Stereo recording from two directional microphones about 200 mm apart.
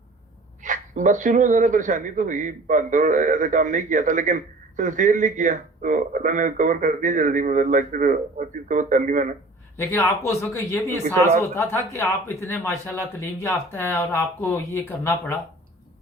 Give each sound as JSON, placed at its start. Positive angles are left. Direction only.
{"t": 0.6, "sound": "a man's voice", "side_deg": -40}
{"t": 9.7, "sound": "speech", "side_deg": 15}